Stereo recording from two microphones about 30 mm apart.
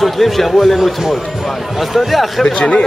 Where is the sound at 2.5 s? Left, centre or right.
Left.